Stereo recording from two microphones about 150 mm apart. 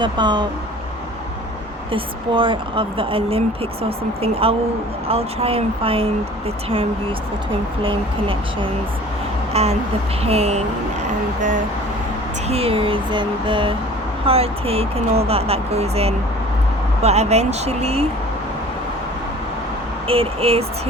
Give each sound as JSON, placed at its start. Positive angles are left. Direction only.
{"t": 0.0, "sound": "a woman's voice", "side_deg": -30}
{"t": 1.9, "sound": "a woman's voice", "side_deg": -35}
{"t": 7.8, "sound": "a woman's voice", "side_deg": -35}
{"t": 12.5, "sound": "a woman's voice", "side_deg": -40}
{"t": 20.1, "sound": "a woman's voice", "side_deg": -40}